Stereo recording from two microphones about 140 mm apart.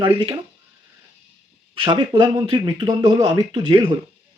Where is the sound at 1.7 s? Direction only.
35° right (ahead or behind).